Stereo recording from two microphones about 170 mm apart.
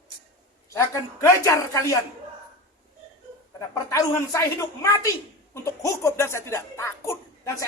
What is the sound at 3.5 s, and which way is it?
A woman's voice, 20° left (ahead or behind).